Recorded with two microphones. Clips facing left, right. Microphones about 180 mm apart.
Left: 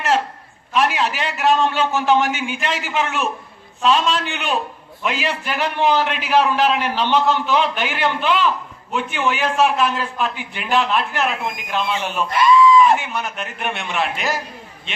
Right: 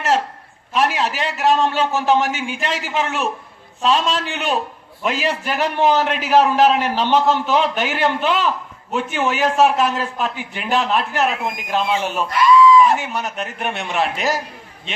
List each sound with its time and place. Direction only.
0.7 s a man's voice: 40° right (ahead or behind)
12.3 s a sound: 25° left (ahead or behind)
13.0 s a man's voice: 40° right (ahead or behind)